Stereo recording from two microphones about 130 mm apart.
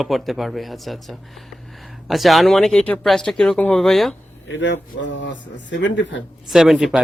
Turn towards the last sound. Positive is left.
turn(degrees=0)  # may be behind; listen again after turning